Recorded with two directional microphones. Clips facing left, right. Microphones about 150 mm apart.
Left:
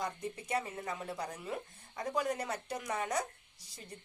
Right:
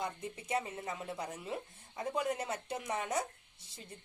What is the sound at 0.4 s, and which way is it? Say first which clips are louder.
Speech: right 1 dB; 25° right (ahead or behind).